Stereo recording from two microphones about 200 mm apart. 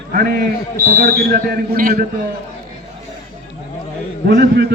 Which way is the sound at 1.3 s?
50° right (ahead or behind).